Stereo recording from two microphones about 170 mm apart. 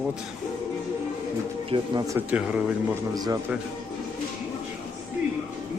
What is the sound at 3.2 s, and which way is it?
Speech, 20° right (ahead or behind).